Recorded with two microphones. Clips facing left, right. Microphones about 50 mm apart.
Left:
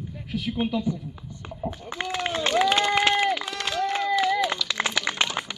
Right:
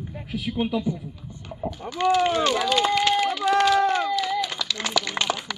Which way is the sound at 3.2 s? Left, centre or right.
Left.